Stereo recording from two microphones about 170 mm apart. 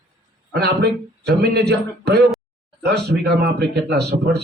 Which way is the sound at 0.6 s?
75° right (ahead or behind).